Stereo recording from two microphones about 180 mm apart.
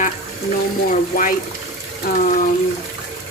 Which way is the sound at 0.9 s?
50° left (ahead or behind).